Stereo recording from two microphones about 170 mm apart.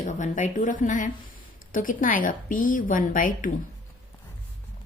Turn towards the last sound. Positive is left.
turn(degrees=55)  # may be behind; listen again after turning